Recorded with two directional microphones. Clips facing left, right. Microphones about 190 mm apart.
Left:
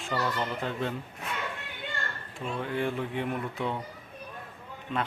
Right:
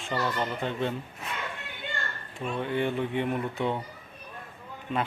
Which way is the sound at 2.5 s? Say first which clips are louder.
Right 2 dB; centre (ahead or behind).